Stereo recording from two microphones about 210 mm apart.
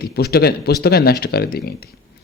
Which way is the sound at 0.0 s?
50° left (ahead or behind).